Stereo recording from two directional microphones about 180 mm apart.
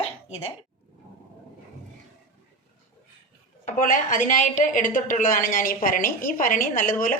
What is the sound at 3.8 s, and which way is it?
A woman's voice, 50° left (ahead or behind).